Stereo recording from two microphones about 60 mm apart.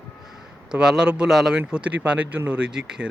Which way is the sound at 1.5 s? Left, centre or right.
Right.